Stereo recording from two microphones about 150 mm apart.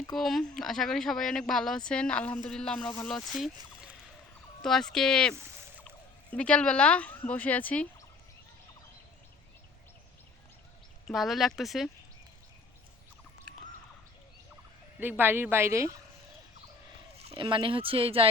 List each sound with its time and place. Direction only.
0.2 s speech: centre (ahead or behind)
6.3 s speech: 10° left (ahead or behind)
11.0 s speech: centre (ahead or behind)
15.0 s a woman's voice: 15° right (ahead or behind)
17.2 s speech: 35° right (ahead or behind)